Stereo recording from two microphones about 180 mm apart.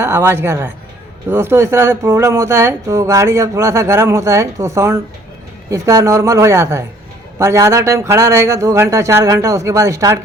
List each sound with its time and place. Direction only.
0.0 s speech: 15° right (ahead or behind)